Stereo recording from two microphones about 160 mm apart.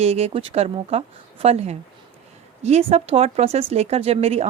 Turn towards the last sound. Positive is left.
turn(degrees=-40)  # may be behind; listen again after turning